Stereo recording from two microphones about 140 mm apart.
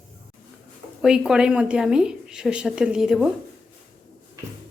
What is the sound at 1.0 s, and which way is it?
A woman's voice, 5° right (ahead or behind).